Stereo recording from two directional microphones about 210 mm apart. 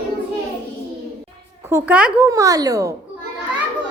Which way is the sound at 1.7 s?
10° right (ahead or behind).